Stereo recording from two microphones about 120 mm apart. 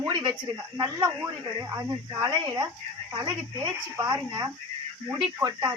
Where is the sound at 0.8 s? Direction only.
30° right (ahead or behind).